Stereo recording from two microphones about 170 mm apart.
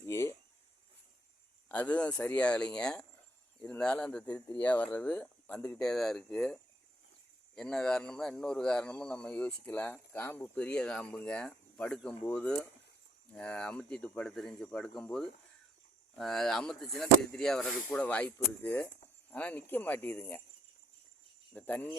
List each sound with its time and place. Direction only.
0.0 s a sound: 15° left (ahead or behind)
1.7 s speech: 5° left (ahead or behind)
21.5 s speech: 10° left (ahead or behind)